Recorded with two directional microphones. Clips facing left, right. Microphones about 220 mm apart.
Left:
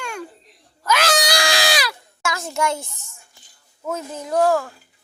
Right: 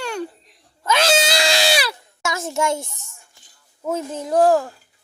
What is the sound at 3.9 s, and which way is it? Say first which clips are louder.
Speech: right 3 dB; 25° right (ahead or behind).